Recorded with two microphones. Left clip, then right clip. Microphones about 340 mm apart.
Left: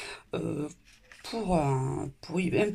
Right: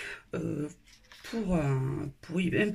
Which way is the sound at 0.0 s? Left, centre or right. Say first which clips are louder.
Left 1 dB; centre.